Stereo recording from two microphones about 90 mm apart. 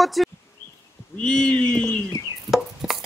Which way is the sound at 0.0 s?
Centre (ahead or behind).